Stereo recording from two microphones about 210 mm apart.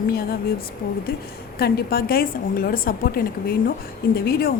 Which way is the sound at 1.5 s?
45° left (ahead or behind).